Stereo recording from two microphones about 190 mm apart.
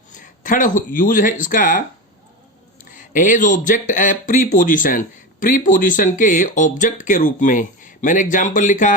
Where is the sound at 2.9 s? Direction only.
45° left (ahead or behind).